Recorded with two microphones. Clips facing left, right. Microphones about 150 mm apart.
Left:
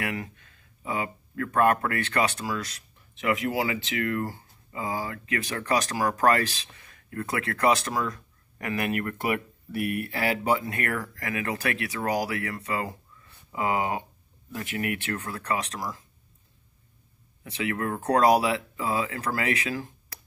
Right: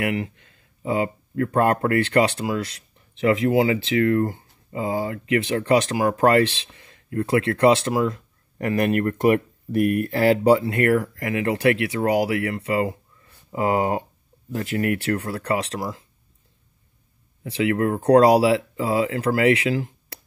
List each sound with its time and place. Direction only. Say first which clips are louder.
0.1 s speech: right 7 dB; 30° right (ahead or behind)
17.4 s speech: right 8 dB; 30° right (ahead or behind)